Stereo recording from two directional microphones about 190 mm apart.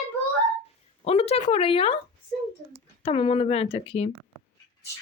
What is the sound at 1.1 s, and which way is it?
Speech, 30° left (ahead or behind).